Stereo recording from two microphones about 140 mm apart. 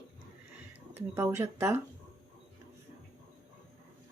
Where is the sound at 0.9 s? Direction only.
20° right (ahead or behind).